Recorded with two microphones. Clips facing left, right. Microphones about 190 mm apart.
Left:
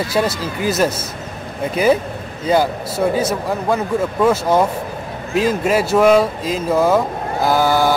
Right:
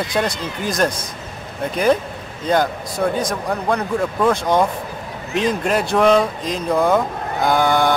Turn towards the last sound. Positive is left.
turn(degrees=5)  # may be behind; listen again after turning